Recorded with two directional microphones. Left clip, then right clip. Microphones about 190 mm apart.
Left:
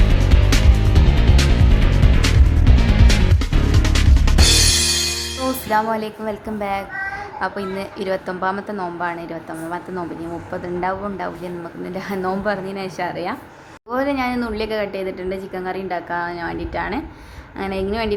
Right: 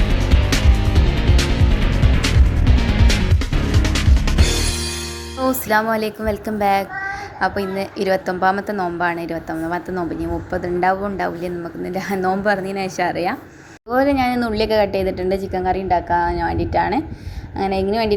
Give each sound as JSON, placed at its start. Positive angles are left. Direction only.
{"t": 0.0, "sound": "music", "side_deg": 0}
{"t": 5.6, "sound": "a woman's voice", "side_deg": -15}